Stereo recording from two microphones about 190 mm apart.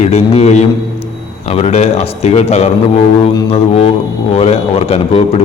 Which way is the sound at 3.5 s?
30° left (ahead or behind).